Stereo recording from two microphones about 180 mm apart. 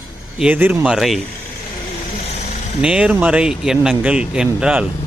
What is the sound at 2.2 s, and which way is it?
Vehicle, 35° left (ahead or behind).